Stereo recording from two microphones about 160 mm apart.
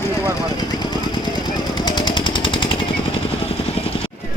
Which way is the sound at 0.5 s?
25° left (ahead or behind).